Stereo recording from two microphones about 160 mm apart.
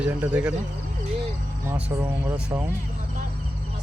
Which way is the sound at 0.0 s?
10° right (ahead or behind).